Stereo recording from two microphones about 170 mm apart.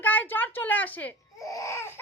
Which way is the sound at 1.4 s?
20° left (ahead or behind).